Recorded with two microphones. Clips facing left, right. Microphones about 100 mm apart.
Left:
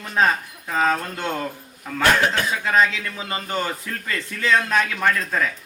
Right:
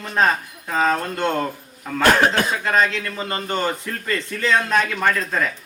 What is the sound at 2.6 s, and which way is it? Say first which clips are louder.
Speech: left 3 dB; centre (ahead or behind).